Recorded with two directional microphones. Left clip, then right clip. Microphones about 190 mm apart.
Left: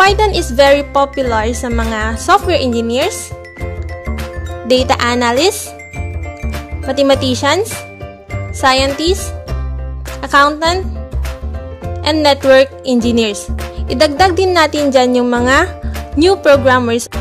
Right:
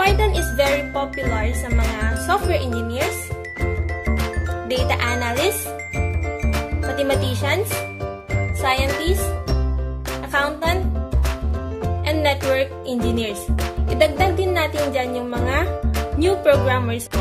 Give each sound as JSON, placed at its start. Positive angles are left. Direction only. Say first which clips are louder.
{"t": 0.0, "sound": "speech", "louder": "left 9 dB", "side_deg": 50}
{"t": 4.6, "sound": "speech", "louder": "left 10 dB", "side_deg": 50}
{"t": 7.0, "sound": "speech", "louder": "left 10 dB", "side_deg": 50}
{"t": 8.6, "sound": "speech", "louder": "left 9 dB", "side_deg": 55}
{"t": 10.2, "sound": "speech", "louder": "left 11 dB", "side_deg": 55}
{"t": 12.0, "sound": "speech", "louder": "left 9 dB", "side_deg": 55}